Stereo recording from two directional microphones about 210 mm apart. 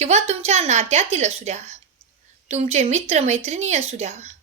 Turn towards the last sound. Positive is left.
turn(degrees=-30)  # may be behind; listen again after turning